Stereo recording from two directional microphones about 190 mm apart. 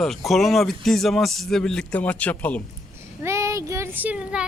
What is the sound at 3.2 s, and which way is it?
Speech, 15° right (ahead or behind).